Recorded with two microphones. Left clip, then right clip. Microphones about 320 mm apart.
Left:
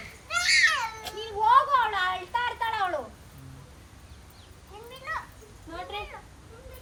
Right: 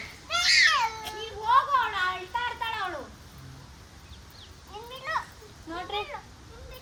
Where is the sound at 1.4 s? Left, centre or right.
Centre.